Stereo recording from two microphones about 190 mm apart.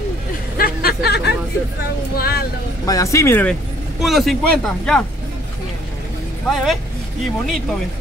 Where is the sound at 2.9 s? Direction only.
15° left (ahead or behind).